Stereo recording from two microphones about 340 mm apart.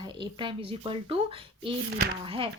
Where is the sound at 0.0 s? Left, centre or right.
Centre.